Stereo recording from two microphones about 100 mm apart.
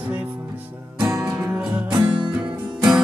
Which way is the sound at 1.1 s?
35° right (ahead or behind).